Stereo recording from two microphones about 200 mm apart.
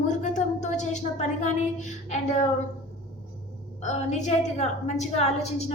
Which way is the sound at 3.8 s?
35° left (ahead or behind).